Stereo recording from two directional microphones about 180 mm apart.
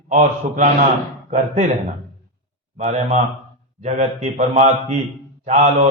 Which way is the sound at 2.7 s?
40° right (ahead or behind).